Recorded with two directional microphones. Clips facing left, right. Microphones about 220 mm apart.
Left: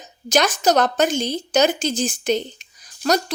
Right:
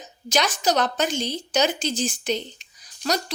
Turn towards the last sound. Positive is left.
turn(degrees=50)  # may be behind; listen again after turning